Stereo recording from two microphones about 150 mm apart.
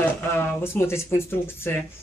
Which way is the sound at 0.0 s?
15° left (ahead or behind).